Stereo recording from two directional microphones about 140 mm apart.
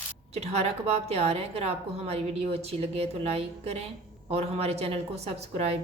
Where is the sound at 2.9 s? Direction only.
45° right (ahead or behind).